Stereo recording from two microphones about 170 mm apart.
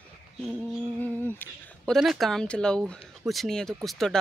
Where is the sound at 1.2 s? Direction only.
10° left (ahead or behind).